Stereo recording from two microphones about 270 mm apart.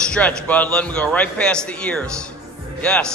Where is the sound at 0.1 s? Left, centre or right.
Centre.